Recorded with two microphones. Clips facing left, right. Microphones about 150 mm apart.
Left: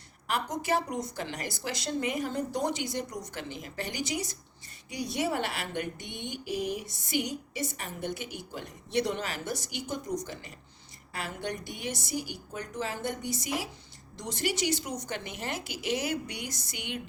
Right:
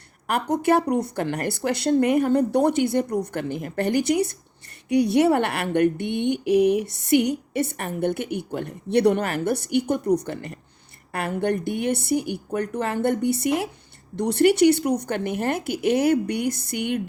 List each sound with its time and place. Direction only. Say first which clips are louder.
0.3 s speech: right 9 dB; 60° right (ahead or behind)